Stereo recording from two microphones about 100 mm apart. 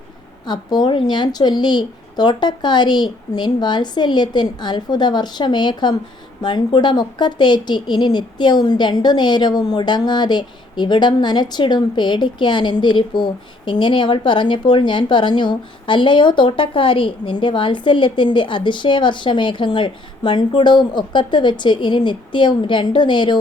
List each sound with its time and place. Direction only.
0.4 s a woman's voice: 45° left (ahead or behind)